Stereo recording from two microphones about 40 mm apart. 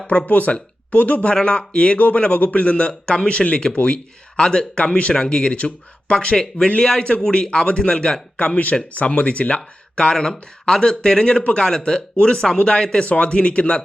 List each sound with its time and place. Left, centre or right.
0.1 s speech: left
1.3 s speech: left
6.1 s speech: centre
9.0 s speech: left
10.0 s speech: centre